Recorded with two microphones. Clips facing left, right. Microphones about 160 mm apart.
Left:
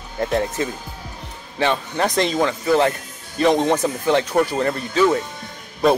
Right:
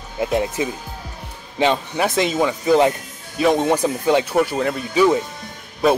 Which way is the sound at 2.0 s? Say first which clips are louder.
Even; 5° right (ahead or behind).